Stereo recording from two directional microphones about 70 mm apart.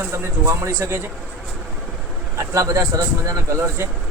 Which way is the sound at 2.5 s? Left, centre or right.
Right.